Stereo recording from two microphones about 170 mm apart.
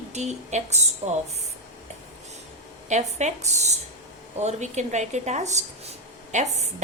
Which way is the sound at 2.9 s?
45° right (ahead or behind).